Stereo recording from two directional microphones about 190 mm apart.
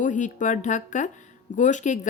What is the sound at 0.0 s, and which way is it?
A woman's voice, 40° left (ahead or behind).